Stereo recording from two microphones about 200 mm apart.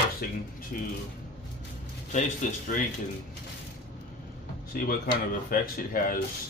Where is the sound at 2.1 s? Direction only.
35° left (ahead or behind).